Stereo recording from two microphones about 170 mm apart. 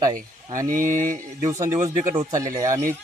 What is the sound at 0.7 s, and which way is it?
Speech, 50° right (ahead or behind).